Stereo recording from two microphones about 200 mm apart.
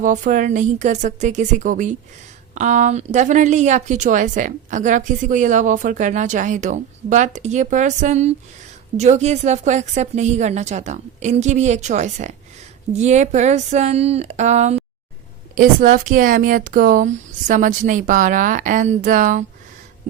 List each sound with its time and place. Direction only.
0.0 s speech: 40° right (ahead or behind)